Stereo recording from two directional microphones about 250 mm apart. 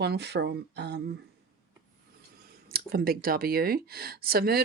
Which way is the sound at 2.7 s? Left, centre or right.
Right.